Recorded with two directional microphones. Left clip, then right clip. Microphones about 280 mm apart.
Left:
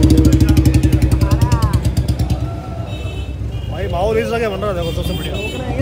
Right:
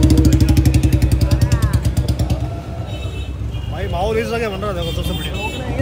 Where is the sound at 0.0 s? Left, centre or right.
Centre.